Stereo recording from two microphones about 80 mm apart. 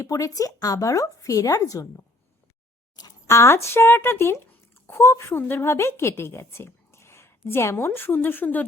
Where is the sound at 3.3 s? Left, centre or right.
Left.